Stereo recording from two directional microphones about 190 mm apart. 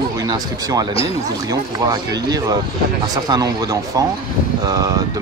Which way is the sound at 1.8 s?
20° right (ahead or behind).